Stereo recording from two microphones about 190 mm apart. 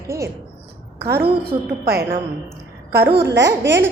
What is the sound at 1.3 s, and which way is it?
A woman's voice, 55° right (ahead or behind).